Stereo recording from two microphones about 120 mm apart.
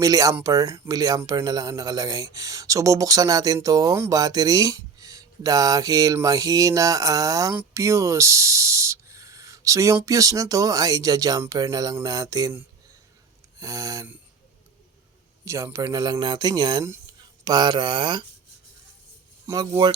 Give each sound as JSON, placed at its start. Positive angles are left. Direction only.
{"t": 0.0, "sound": "speech", "side_deg": -30}
{"t": 13.6, "sound": "speech", "side_deg": -30}
{"t": 15.4, "sound": "speech", "side_deg": -25}
{"t": 19.5, "sound": "speech", "side_deg": -25}